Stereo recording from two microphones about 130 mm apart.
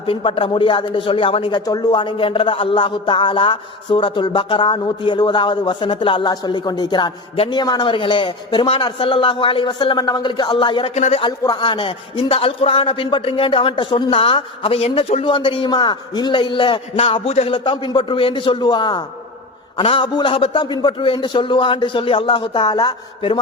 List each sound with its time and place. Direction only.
0.0 s a man's voice: 40° left (ahead or behind)
10.9 s speech: 60° left (ahead or behind)
11.2 s a man's voice: 35° left (ahead or behind); by 17.6 s 50° left (ahead or behind)
17.6 s a man's voice: 40° left (ahead or behind)